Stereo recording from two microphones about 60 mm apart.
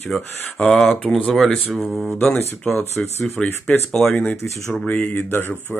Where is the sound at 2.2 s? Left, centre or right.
Centre.